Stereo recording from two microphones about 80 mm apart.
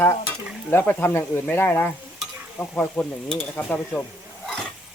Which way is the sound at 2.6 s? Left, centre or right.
Centre.